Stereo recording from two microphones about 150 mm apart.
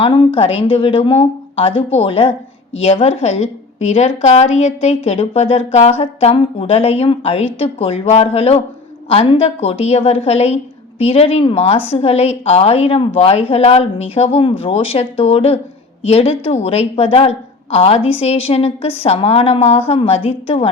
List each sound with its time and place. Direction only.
0.0 s a woman's voice: 35° left (ahead or behind)